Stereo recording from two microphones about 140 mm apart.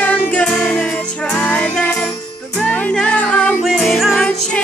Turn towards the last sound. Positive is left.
turn(degrees=5)  # may be behind; listen again after turning